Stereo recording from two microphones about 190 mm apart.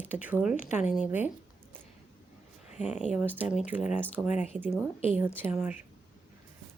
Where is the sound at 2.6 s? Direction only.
35° left (ahead or behind).